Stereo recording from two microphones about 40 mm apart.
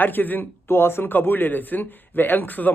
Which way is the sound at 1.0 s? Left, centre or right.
Left.